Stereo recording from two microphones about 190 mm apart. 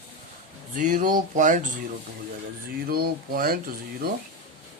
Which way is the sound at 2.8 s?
50° right (ahead or behind).